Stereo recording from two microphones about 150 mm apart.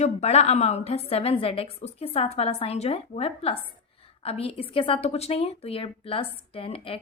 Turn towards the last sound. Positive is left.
turn(degrees=35)  # may be behind; listen again after turning